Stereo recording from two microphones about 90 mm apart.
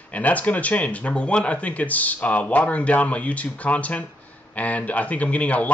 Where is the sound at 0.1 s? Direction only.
15° left (ahead or behind).